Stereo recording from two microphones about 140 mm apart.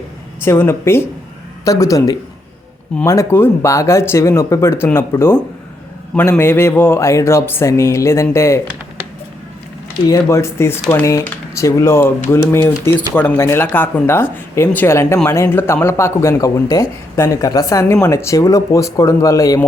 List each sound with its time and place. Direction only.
0.4 s speech: 15° left (ahead or behind)
10.1 s speech: 20° left (ahead or behind)